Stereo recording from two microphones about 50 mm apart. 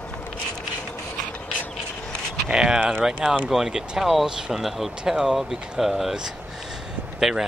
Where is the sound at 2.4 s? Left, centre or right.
Centre.